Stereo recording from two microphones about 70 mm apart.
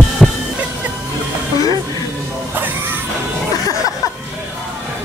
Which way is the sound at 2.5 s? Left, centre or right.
Right.